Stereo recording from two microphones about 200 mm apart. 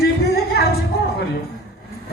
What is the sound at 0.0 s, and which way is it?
Music, 50° left (ahead or behind).